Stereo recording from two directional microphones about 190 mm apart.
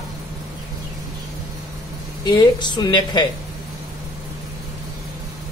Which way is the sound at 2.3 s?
25° left (ahead or behind).